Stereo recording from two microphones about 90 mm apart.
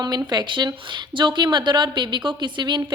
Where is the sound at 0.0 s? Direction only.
55° right (ahead or behind).